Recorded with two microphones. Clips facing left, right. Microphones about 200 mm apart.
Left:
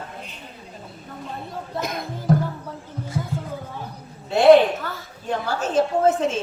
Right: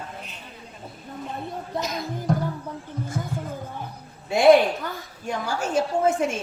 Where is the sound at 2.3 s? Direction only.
5° left (ahead or behind).